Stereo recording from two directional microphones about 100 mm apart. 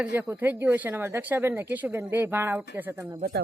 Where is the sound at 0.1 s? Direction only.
20° right (ahead or behind).